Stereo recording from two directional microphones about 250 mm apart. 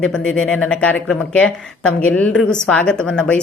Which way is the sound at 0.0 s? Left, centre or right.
Centre.